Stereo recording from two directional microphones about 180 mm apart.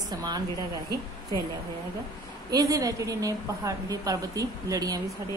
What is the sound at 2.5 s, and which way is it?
A woman's voice, 20° right (ahead or behind).